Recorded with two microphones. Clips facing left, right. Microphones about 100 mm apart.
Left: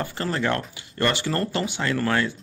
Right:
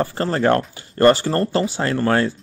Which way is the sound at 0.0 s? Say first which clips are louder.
Right 7 dB; 35° right (ahead or behind).